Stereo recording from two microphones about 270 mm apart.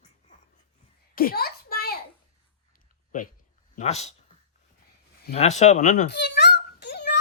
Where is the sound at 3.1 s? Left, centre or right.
Left.